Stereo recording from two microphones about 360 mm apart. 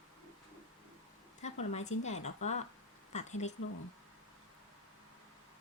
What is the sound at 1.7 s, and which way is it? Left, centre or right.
Speech, centre.